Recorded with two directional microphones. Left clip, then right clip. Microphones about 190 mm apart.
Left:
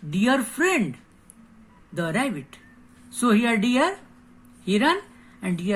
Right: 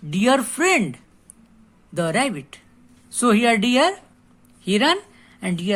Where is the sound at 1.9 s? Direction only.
45° right (ahead or behind).